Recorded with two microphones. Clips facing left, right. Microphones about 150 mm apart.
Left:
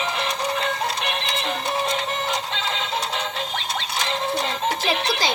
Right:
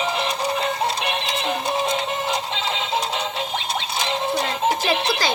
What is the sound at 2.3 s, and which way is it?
Synthetic singing, 15° right (ahead or behind).